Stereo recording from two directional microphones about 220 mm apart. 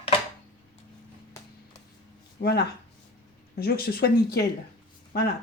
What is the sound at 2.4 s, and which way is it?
Speech, 45° left (ahead or behind).